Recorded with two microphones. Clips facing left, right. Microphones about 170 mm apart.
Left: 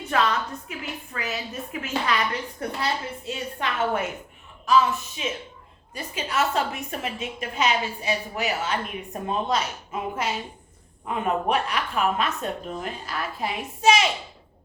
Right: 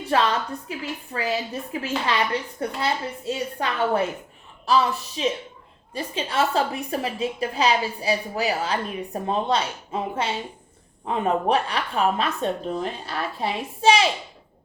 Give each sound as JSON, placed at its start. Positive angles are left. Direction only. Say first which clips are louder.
{"t": 0.0, "sound": "a woman's voice", "louder": "right 2 dB", "side_deg": -30}